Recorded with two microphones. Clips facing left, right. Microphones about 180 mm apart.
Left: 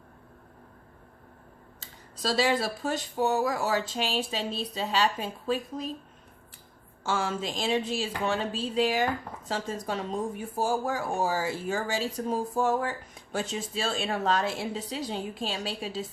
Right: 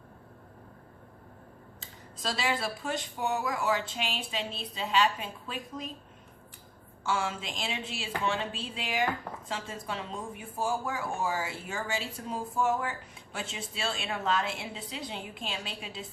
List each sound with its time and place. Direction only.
1.8 s speech: 40° left (ahead or behind)
7.0 s speech: 40° left (ahead or behind)